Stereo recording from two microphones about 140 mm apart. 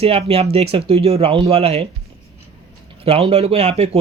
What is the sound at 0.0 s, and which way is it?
Speech, 45° right (ahead or behind).